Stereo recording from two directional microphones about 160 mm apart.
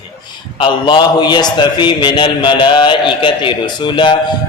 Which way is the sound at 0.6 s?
30° left (ahead or behind).